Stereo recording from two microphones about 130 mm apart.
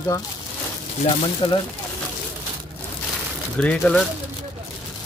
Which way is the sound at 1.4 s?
40° left (ahead or behind).